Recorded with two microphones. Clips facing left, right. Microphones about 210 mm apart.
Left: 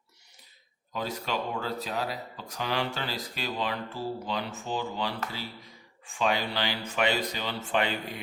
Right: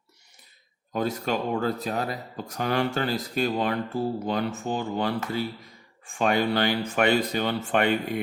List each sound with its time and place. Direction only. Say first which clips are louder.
0.9 s speech: right 6 dB; 50° right (ahead or behind)